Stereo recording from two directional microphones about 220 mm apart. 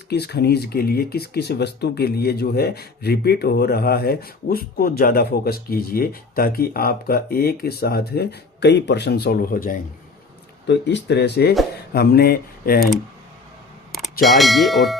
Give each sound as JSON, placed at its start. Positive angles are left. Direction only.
{"t": 0.1, "sound": "speech", "side_deg": 50}
{"t": 10.7, "sound": "speech", "side_deg": 50}
{"t": 13.9, "sound": "speech", "side_deg": 0}